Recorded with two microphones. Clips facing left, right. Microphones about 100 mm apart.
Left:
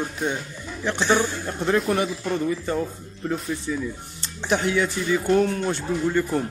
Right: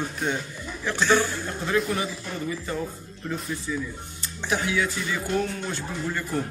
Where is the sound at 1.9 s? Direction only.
50° left (ahead or behind).